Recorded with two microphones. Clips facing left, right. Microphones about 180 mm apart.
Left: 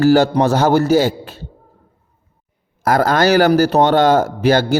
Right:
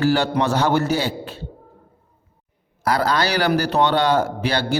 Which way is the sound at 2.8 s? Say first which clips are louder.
Left 6 dB; 50° left (ahead or behind).